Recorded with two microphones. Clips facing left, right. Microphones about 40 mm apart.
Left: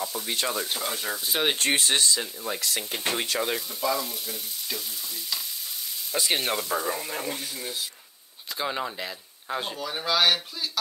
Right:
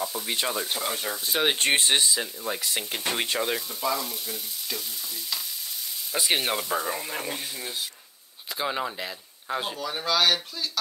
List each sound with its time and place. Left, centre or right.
0.0 s speech: centre
1.6 s speech: right
2.0 s speech: centre
6.1 s speech: centre